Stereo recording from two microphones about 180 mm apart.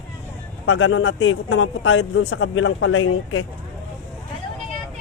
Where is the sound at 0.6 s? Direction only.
90° left.